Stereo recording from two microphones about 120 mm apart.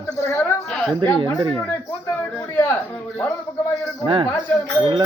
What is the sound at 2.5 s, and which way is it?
Speech, 15° left (ahead or behind).